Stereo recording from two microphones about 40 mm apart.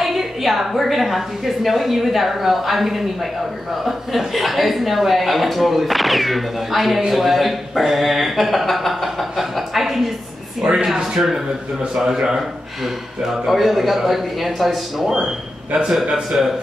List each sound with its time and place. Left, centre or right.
0.0 s speech: centre
10.6 s speech: centre
11.1 s speech: centre
15.7 s speech: centre